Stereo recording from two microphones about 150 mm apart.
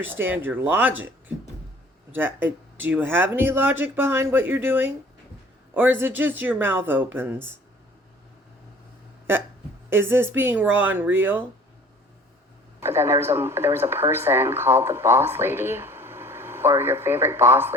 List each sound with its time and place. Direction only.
0.1 s speech: 15° right (ahead or behind)
2.1 s speech: 15° right (ahead or behind)
9.9 s speech: 15° right (ahead or behind)
12.8 s speech: 15° right (ahead or behind)